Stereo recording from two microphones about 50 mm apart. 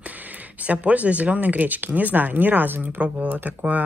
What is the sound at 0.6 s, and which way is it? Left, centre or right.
Speech, right.